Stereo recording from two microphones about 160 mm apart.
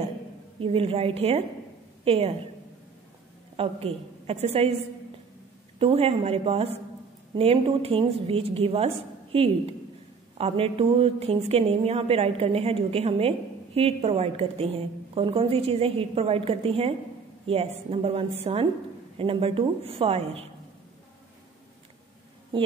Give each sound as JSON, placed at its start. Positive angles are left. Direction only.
{"t": 0.6, "sound": "a woman's voice", "side_deg": -35}
{"t": 3.5, "sound": "a woman's voice", "side_deg": -40}
{"t": 5.8, "sound": "a woman's voice", "side_deg": -40}